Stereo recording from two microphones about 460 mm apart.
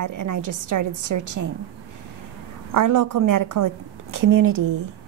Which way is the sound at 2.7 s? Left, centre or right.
Right.